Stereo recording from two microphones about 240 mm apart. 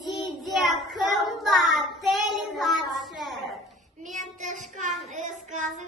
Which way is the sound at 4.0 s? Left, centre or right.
Right.